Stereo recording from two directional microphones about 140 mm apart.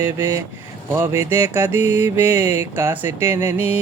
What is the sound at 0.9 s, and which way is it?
Mantra, 20° right (ahead or behind).